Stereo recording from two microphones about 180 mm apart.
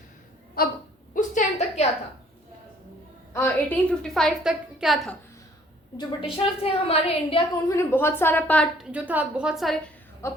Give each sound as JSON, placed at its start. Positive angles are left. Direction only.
{"t": 0.6, "sound": "speech", "side_deg": 55}
{"t": 1.1, "sound": "a sound", "side_deg": 45}
{"t": 3.3, "sound": "a woman's voice", "side_deg": 10}
{"t": 6.0, "sound": "a woman's voice", "side_deg": 25}
{"t": 7.7, "sound": "a woman's voice", "side_deg": 15}
{"t": 8.9, "sound": "a woman's voice", "side_deg": -10}
{"t": 10.2, "sound": "a woman's voice", "side_deg": 15}